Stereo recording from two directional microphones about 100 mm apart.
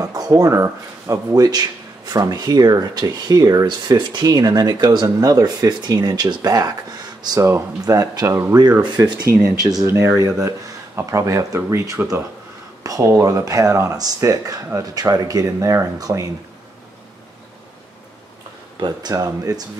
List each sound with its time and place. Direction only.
0.0 s speech: 40° right (ahead or behind)
18.8 s speech: 45° right (ahead or behind)